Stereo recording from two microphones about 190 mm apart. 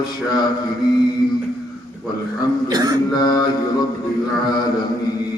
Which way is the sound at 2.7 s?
20° right (ahead or behind).